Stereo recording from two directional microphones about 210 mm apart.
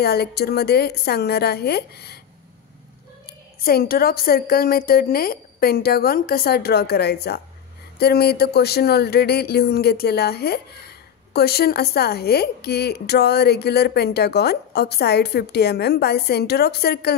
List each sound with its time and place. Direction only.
0.0 s a woman's voice: 50° left (ahead or behind)
3.3 s a woman's voice: 45° left (ahead or behind)